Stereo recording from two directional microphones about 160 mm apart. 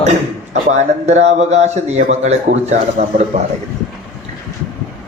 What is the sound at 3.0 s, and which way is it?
Speech, 60° right (ahead or behind).